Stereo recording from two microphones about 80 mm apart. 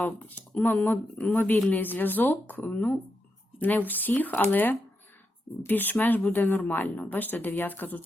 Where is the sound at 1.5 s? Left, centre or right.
Centre.